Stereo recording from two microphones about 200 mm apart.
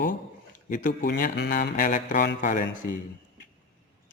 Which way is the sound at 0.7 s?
45° left (ahead or behind).